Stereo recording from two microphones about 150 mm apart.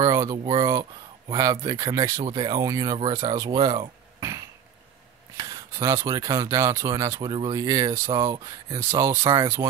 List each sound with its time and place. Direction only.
0.0 s a sound: 20° right (ahead or behind)
0.4 s speech: 35° right (ahead or behind)
1.3 s speech: 25° right (ahead or behind)
2.2 s speech: 30° right (ahead or behind)
5.4 s speech: 20° right (ahead or behind)